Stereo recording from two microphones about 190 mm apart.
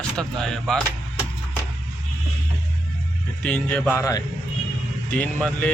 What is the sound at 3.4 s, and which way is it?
Speech, 5° left (ahead or behind).